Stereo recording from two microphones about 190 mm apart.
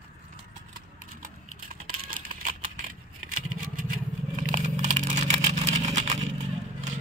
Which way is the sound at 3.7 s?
45° right (ahead or behind).